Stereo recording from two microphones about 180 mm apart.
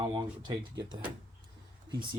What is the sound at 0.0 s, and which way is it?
Speech, 25° right (ahead or behind).